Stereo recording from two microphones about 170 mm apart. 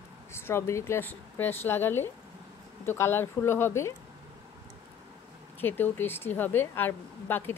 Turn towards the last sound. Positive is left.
turn(degrees=10)  # may be behind; listen again after turning